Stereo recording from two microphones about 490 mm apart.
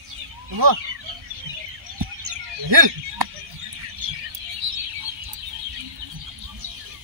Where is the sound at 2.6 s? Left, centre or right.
Right.